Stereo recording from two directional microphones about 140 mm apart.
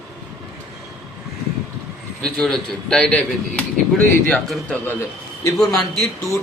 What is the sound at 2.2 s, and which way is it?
A man's voice, 5° left (ahead or behind).